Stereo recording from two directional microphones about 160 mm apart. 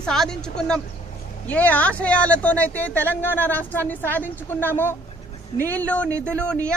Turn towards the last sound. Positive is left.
turn(degrees=5)  # may be behind; listen again after turning